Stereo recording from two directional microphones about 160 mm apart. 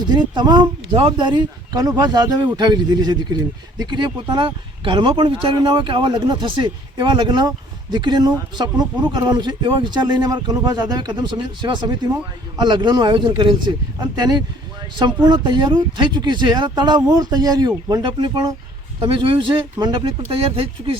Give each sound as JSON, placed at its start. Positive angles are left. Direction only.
{"t": 0.1, "sound": "speech", "side_deg": -25}